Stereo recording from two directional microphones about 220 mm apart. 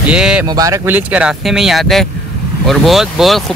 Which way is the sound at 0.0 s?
5° right (ahead or behind).